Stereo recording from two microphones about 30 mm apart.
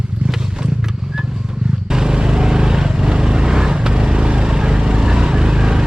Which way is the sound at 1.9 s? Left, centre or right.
Right.